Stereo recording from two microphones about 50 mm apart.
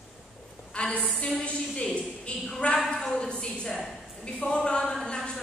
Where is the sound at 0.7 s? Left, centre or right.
Left.